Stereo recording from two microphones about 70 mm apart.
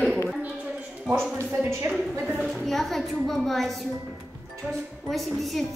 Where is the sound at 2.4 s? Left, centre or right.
Centre.